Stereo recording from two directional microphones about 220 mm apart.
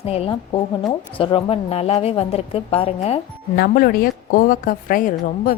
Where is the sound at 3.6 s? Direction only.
40° left (ahead or behind).